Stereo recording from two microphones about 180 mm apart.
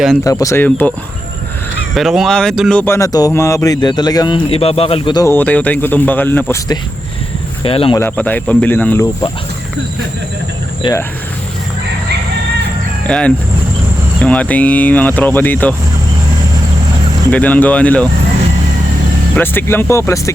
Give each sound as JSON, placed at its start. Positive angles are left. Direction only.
{"t": 0.3, "sound": "speech", "side_deg": 20}
{"t": 2.0, "sound": "speech", "side_deg": 0}
{"t": 5.2, "sound": "speech", "side_deg": 10}
{"t": 7.6, "sound": "speech", "side_deg": 30}
{"t": 7.9, "sound": "speech", "side_deg": 10}
{"t": 10.8, "sound": "speech", "side_deg": 25}
{"t": 13.1, "sound": "speech", "side_deg": 5}
{"t": 17.3, "sound": "speech", "side_deg": 10}
{"t": 19.4, "sound": "speech", "side_deg": 10}